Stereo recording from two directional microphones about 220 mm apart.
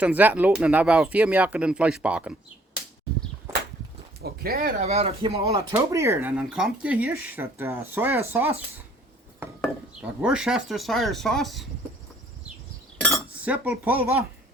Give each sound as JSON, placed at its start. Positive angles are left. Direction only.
{"t": 0.0, "sound": "speech", "side_deg": -5}
{"t": 3.5, "sound": "walk", "side_deg": -15}
{"t": 4.2, "sound": "speech", "side_deg": -45}
{"t": 4.8, "sound": "speech", "side_deg": -30}
{"t": 5.4, "sound": "speech", "side_deg": -15}
{"t": 10.2, "sound": "speech", "side_deg": -5}
{"t": 13.4, "sound": "speech", "side_deg": -5}